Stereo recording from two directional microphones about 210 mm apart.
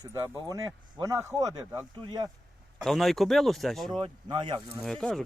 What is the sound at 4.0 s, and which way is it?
Speech, 20° right (ahead or behind).